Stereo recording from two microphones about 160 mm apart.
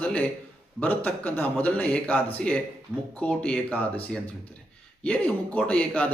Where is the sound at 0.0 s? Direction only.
10° left (ahead or behind).